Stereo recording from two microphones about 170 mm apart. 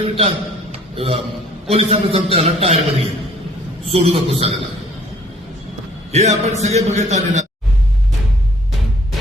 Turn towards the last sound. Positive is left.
turn(degrees=-45)  # may be behind; listen again after turning